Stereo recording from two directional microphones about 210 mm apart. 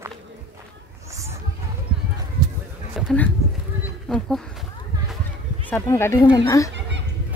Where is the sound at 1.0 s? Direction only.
15° right (ahead or behind).